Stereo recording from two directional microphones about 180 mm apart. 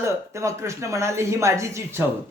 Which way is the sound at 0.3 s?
15° right (ahead or behind).